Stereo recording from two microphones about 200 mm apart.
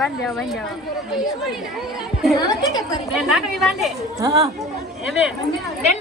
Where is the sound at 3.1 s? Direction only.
Centre (ahead or behind).